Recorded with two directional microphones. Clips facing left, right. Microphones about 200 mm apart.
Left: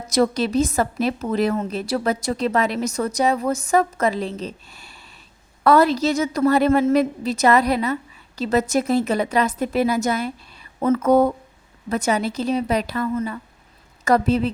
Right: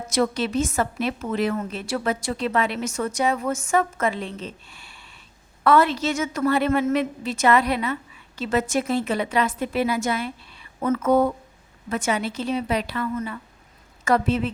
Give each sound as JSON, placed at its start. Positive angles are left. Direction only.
{"t": 0.1, "sound": "a woman's voice", "side_deg": 40}